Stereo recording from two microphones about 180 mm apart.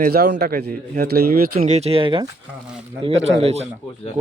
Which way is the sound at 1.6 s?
35° right (ahead or behind).